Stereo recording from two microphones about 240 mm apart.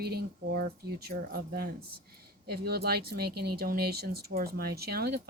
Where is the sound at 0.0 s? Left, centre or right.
Right.